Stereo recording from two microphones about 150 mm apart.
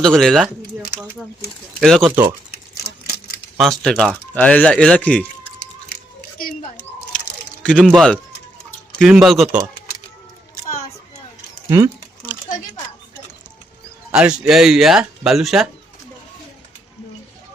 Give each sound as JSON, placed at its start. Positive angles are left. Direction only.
{"t": 0.0, "sound": "speech", "side_deg": 5}
{"t": 1.8, "sound": "speech", "side_deg": 5}
{"t": 2.0, "sound": "speech", "side_deg": -15}
{"t": 3.6, "sound": "speech", "side_deg": 5}
{"t": 7.6, "sound": "speech", "side_deg": 5}
{"t": 11.7, "sound": "a sound", "side_deg": -15}
{"t": 14.1, "sound": "speech", "side_deg": -5}